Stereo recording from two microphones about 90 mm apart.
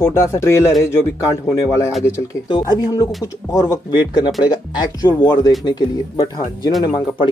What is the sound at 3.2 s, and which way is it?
Speech, 40° left (ahead or behind).